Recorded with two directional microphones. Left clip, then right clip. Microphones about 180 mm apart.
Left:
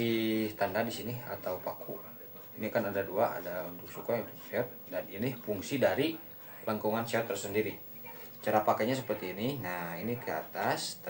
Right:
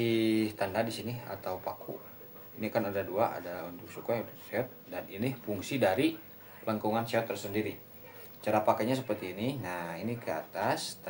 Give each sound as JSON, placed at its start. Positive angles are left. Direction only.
{"t": 0.0, "sound": "speech", "side_deg": -35}